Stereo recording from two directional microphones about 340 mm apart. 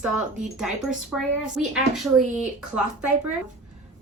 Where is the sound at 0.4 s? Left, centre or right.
Centre.